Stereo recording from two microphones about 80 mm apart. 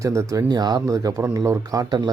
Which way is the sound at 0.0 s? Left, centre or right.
Right.